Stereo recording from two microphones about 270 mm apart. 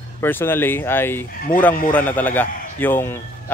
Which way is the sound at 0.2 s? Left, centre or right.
Centre.